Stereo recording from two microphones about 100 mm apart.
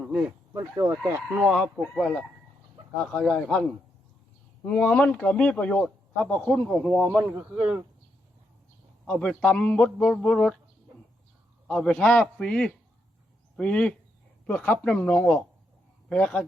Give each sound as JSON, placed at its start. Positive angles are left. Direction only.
{"t": 0.0, "sound": "a sound", "side_deg": -10}
{"t": 0.5, "sound": "speech", "side_deg": -30}
{"t": 1.0, "sound": "a man's voice", "side_deg": -15}
{"t": 7.1, "sound": "speech", "side_deg": -10}
{"t": 9.1, "sound": "a man's voice", "side_deg": 10}
{"t": 11.7, "sound": "a man's voice", "side_deg": 10}